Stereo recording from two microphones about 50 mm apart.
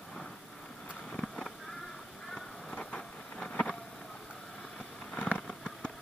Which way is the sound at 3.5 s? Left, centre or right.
Left.